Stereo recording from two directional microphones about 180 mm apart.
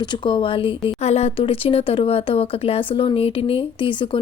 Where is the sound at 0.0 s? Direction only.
25° left (ahead or behind).